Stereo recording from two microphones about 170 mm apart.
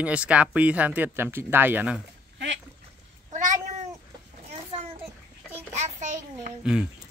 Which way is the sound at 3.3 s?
50° right (ahead or behind).